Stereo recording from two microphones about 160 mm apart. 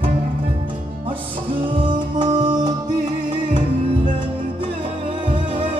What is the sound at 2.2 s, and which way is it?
Music, 25° right (ahead or behind).